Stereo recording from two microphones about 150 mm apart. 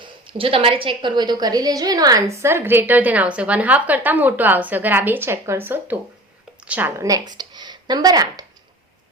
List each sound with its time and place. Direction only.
0.0 s a woman's voice: 35° right (ahead or behind)